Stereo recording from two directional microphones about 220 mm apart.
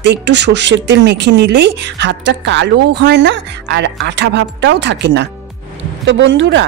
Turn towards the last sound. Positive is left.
turn(degrees=-55)  # may be behind; listen again after turning